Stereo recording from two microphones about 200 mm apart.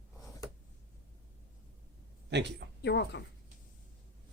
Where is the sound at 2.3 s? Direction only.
60° right (ahead or behind).